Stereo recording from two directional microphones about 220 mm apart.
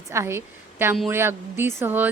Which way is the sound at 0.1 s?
10° right (ahead or behind).